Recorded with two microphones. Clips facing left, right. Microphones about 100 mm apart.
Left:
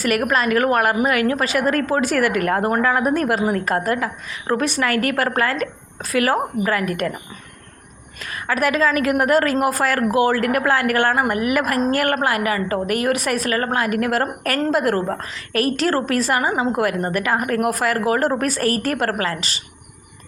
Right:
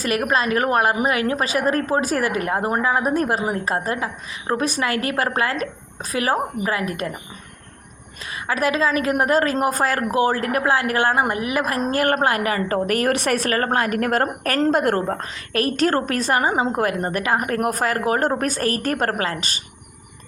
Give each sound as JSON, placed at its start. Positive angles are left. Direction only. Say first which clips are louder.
{"t": 0.0, "sound": "a woman's voice", "louder": "left 2 dB", "side_deg": -25}
{"t": 8.2, "sound": "a woman's voice", "louder": "left 1 dB", "side_deg": -25}